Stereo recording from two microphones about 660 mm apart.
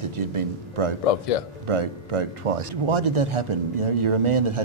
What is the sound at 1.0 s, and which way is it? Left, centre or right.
Speech, left.